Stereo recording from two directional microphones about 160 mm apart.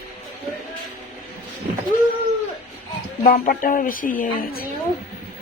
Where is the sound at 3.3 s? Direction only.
60° left (ahead or behind).